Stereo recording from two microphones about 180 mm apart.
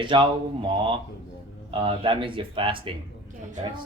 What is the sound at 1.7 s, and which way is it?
Speech, 30° right (ahead or behind).